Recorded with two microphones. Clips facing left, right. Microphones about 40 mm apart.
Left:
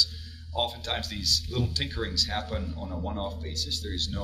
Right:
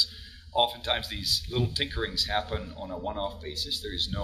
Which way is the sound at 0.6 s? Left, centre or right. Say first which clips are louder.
Right 4 dB; right.